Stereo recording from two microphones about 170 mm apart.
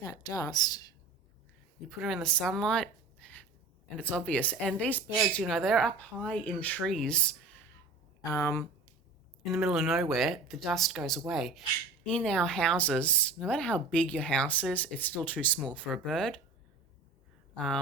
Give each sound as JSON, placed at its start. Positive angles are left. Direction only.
{"t": 0.2, "sound": "a woman's voice", "side_deg": 25}
{"t": 1.9, "sound": "speech", "side_deg": 0}
{"t": 3.9, "sound": "speech", "side_deg": 5}
{"t": 8.2, "sound": "speech", "side_deg": 20}
{"t": 9.5, "sound": "speech", "side_deg": 0}
{"t": 17.5, "sound": "speech", "side_deg": 5}